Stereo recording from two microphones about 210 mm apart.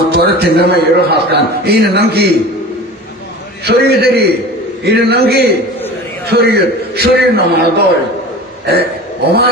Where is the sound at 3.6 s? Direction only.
50° right (ahead or behind).